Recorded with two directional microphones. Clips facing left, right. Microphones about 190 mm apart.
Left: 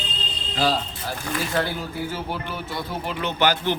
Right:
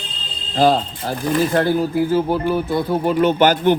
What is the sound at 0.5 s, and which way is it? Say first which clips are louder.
A man's voice: right 8 dB; 50° right (ahead or behind).